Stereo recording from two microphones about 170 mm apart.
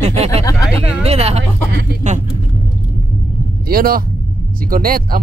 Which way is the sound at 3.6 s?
60° right (ahead or behind).